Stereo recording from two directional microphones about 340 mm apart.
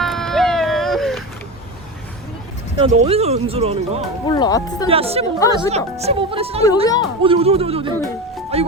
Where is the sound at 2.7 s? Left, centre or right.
Centre.